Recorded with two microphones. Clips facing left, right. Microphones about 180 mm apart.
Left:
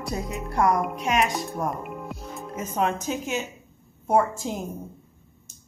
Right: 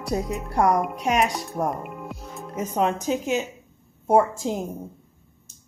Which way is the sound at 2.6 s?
35° right (ahead or behind).